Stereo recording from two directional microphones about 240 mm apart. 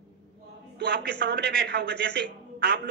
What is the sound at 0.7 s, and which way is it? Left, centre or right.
A man's voice, right.